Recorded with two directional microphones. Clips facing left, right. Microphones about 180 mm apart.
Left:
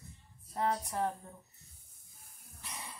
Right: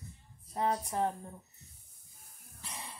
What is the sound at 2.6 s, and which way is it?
Throat clearing, 30° right (ahead or behind).